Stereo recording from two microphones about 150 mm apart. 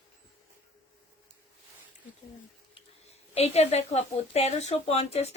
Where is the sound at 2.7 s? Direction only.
45° left (ahead or behind).